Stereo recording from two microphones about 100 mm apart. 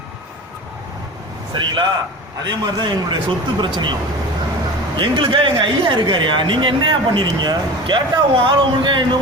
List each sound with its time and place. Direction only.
1.5 s speech: 50° right (ahead or behind)
4.9 s speech: 60° right (ahead or behind)